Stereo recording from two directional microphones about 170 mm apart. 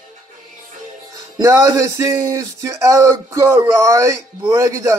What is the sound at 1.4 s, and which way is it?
Speech, 20° right (ahead or behind).